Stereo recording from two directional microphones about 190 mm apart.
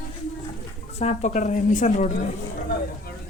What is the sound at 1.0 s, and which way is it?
Speech, 35° left (ahead or behind).